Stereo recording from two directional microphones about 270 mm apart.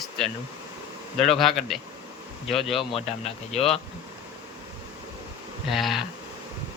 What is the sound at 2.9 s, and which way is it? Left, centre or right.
Speech, left.